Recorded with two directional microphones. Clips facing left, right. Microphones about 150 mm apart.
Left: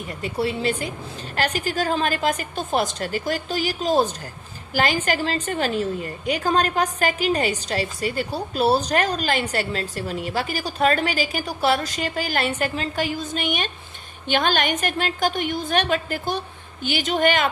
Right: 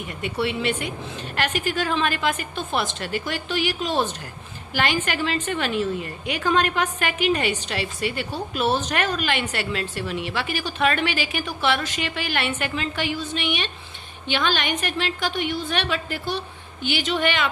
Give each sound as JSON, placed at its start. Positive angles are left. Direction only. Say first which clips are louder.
{"t": 0.1, "sound": "a woman's voice", "louder": "left 1 dB", "side_deg": 35}